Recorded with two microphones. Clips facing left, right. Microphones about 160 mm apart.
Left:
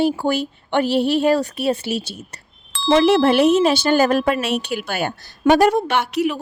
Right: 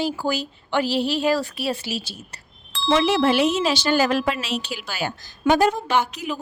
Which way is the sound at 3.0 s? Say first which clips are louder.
Left 6 dB; 60° left (ahead or behind).